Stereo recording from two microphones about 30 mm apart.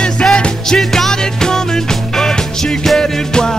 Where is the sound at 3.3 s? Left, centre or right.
Left.